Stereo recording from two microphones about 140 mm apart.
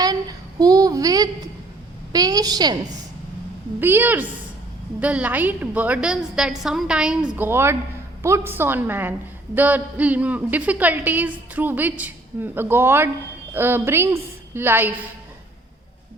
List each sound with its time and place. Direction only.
0.0 s a woman's voice: 25° right (ahead or behind)
3.8 s a woman's voice: 15° right (ahead or behind)
7.3 s a woman's voice: 15° right (ahead or behind)